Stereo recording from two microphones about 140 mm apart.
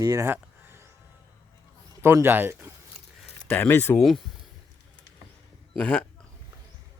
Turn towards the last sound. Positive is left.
turn(degrees=5)  # may be behind; listen again after turning